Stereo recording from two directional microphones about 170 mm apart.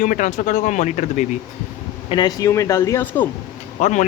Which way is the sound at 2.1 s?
25° left (ahead or behind).